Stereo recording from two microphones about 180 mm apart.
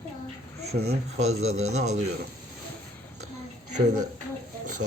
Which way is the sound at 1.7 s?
40° right (ahead or behind).